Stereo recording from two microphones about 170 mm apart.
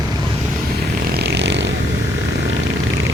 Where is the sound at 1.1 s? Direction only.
85° right.